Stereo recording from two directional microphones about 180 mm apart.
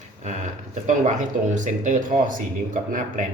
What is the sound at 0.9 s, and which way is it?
Speech, 45° right (ahead or behind).